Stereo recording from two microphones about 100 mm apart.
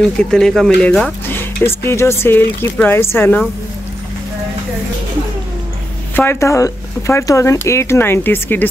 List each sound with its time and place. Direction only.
0.0 s speech: 5° left (ahead or behind)
1.2 s speech: 20° left (ahead or behind)
6.1 s speech: 25° left (ahead or behind)